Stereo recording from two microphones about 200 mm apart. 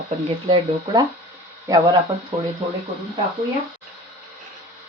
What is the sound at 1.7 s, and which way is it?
Speech, 15° right (ahead or behind).